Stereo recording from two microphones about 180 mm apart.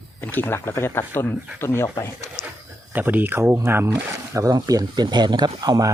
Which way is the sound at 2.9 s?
10° right (ahead or behind).